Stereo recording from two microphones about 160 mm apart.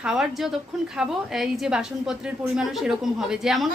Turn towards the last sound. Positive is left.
turn(degrees=0)  # may be behind; listen again after turning